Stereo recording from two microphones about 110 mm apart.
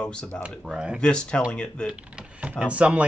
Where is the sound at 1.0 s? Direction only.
10° left (ahead or behind).